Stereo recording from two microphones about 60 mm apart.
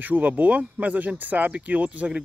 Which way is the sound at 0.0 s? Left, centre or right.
Right.